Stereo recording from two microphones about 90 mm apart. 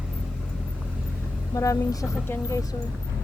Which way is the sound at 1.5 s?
35° left (ahead or behind).